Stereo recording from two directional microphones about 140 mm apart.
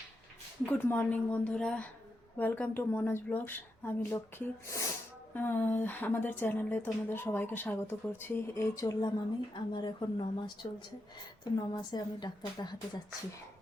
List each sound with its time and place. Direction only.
0.6 s speech: 10° left (ahead or behind); by 10.7 s 35° left (ahead or behind)
11.7 s speech: 30° left (ahead or behind)